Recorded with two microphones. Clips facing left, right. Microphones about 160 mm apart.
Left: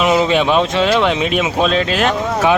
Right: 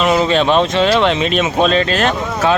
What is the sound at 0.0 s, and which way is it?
Speech, 10° left (ahead or behind).